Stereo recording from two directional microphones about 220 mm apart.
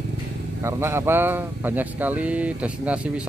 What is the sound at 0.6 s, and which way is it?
Speech, 10° right (ahead or behind).